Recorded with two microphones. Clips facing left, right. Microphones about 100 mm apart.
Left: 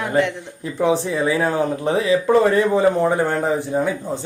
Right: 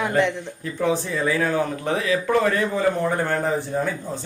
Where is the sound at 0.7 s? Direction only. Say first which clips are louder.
Left 4 dB; 20° left (ahead or behind).